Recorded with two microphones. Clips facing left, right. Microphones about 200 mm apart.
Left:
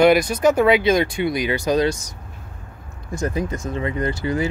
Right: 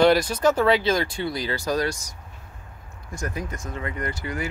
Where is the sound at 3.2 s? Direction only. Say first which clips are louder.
Left 7 dB; 25° left (ahead or behind).